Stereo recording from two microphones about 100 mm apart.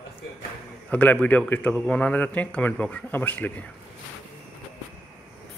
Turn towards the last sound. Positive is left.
turn(degrees=15)  # may be behind; listen again after turning